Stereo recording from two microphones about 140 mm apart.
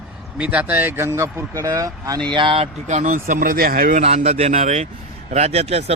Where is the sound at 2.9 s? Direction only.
65° right (ahead or behind); by 4.0 s 85° right.